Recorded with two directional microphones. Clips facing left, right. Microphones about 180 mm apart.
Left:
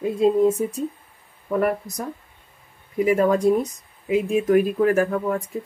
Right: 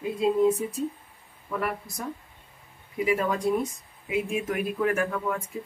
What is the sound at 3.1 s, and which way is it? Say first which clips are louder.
Speech: left 7 dB; 45° left (ahead or behind).